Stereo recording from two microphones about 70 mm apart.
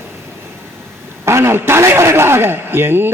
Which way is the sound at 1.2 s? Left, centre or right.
Right.